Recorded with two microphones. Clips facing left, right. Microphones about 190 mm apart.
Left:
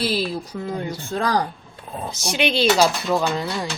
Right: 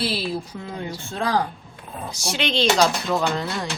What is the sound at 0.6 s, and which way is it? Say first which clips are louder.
Speech: left 4 dB; 45° left (ahead or behind).